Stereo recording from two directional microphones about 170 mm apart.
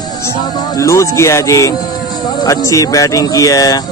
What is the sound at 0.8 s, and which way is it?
Speech, 15° left (ahead or behind).